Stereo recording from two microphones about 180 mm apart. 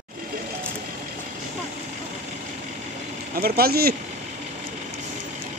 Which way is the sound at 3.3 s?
55° right (ahead or behind).